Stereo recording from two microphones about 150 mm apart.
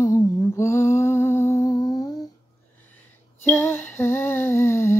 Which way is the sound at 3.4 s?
15° left (ahead or behind).